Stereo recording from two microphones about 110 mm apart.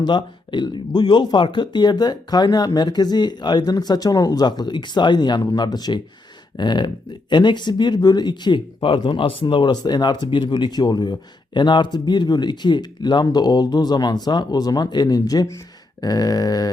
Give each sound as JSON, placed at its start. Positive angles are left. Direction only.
{"t": 0.0, "sound": "speech", "side_deg": 45}